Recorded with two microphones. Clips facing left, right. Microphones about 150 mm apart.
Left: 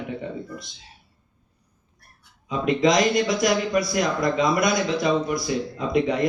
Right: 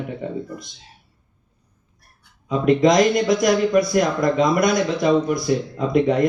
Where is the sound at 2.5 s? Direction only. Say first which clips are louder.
Right 4 dB; 50° right (ahead or behind).